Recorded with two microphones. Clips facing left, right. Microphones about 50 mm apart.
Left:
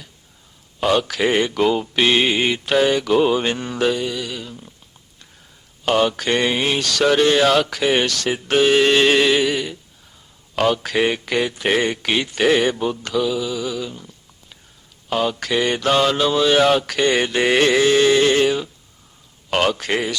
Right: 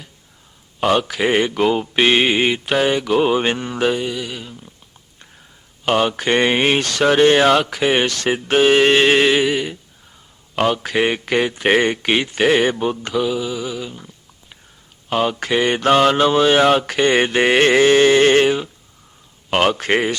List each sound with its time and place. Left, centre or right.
1.0 s speech: centre
5.8 s speech: right
15.1 s speech: right
17.5 s music: right